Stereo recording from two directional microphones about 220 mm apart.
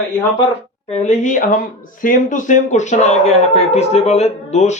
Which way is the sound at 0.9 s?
35° left (ahead or behind).